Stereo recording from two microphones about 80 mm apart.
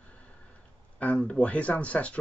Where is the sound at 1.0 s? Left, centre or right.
Centre.